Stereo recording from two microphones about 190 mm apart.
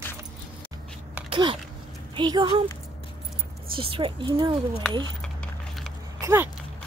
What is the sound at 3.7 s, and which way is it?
Speech, 30° right (ahead or behind).